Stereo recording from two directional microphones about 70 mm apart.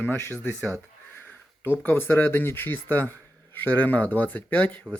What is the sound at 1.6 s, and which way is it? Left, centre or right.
Speech, left.